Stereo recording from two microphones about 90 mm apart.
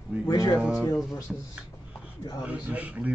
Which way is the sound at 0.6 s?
5° right (ahead or behind).